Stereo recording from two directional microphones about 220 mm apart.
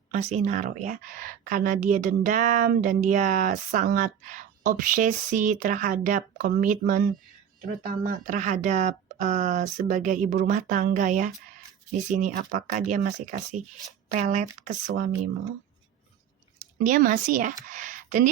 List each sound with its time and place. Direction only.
0.1 s speech: 30° right (ahead or behind)
16.8 s speech: 35° right (ahead or behind)